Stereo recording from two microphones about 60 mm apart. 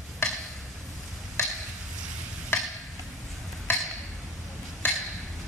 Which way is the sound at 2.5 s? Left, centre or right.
Left.